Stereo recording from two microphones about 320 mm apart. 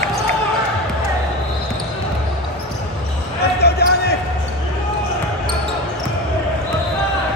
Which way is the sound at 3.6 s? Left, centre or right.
Left.